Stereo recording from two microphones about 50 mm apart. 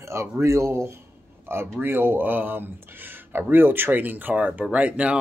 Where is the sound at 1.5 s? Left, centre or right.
Right.